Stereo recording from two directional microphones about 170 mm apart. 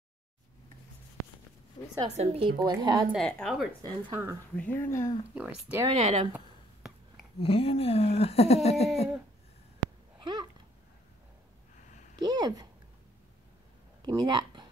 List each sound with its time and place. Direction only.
2.0 s a woman's voice: 40° right (ahead or behind)
2.6 s a woman's voice: 25° right (ahead or behind)
3.3 s speech: centre (ahead or behind)
4.1 s speech: 15° right (ahead or behind)
4.6 s speech: 15° left (ahead or behind)
5.3 s speech: 10° right (ahead or behind)
5.9 s a woman's voice: 35° right (ahead or behind)
6.3 s a sound: 5° right (ahead or behind)
7.3 s speech: 35° left (ahead or behind)
10.1 s a sound: 25° right (ahead or behind)
12.2 s a sound: 25° right (ahead or behind)
14.0 s a sound: 25° right (ahead or behind)